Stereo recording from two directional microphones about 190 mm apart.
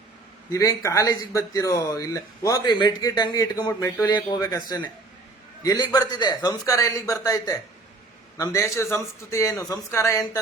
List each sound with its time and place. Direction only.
0.5 s a man's voice: 15° left (ahead or behind)